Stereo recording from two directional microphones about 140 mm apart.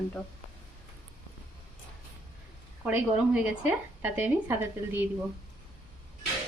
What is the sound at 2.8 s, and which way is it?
A woman's voice, 10° right (ahead or behind).